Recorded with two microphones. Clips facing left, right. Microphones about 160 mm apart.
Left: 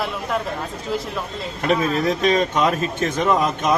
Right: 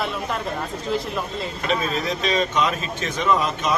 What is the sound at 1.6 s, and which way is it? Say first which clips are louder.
A man's voice: left 6 dB; 50° left (ahead or behind).